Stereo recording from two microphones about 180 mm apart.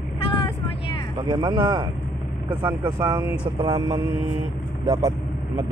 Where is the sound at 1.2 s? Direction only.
25° right (ahead or behind).